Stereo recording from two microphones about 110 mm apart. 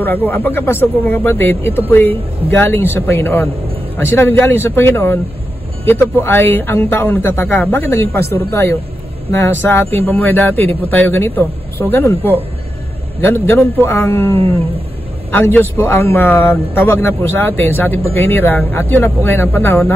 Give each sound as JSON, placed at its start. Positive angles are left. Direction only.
{"t": 0.0, "sound": "speech", "side_deg": 15}